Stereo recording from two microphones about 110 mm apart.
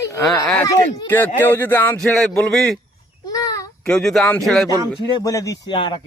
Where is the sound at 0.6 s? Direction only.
30° left (ahead or behind).